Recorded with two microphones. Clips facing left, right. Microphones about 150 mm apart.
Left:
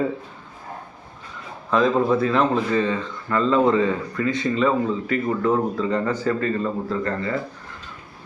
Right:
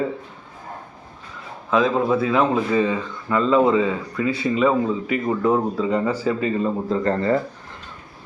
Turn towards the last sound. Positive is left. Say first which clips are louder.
# right 6 dB
turn(degrees=-35)  # may be behind; listen again after turning